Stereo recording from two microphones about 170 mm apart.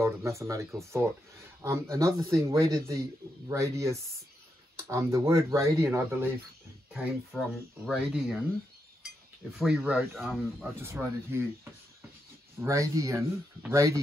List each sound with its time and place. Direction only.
0.0 s a man's voice: 15° right (ahead or behind)
6.9 s speech: centre (ahead or behind)
9.6 s speech: 5° right (ahead or behind)
10.8 s a man's voice: 15° right (ahead or behind)
12.5 s a man's voice: 20° right (ahead or behind)